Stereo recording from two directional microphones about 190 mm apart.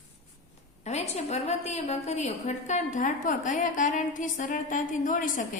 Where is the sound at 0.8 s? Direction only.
35° left (ahead or behind).